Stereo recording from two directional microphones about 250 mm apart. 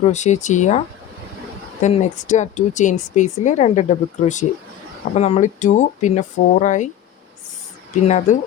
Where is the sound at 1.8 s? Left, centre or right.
Left.